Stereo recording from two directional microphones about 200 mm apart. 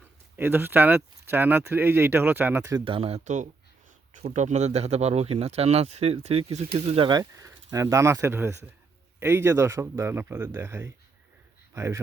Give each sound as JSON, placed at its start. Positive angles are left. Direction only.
{"t": 0.3, "sound": "speech", "side_deg": -10}